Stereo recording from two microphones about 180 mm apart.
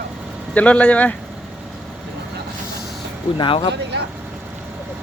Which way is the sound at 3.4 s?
25° left (ahead or behind).